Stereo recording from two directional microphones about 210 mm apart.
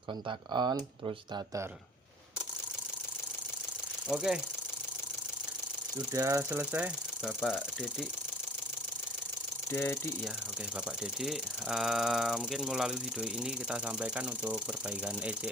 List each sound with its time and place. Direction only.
0.3 s speech: 20° right (ahead or behind)
4.1 s speech: centre (ahead or behind)
6.1 s speech: 15° right (ahead or behind)
9.7 s speech: 10° left (ahead or behind)
11.0 s speech: centre (ahead or behind)